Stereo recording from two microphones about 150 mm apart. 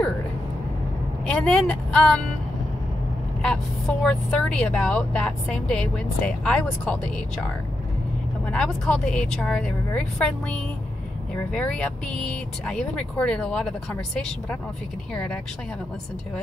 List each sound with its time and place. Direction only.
1.2 s speech: 5° left (ahead or behind)
4.0 s a woman's voice: 5° left (ahead or behind)
8.5 s a woman's voice: 5° left (ahead or behind)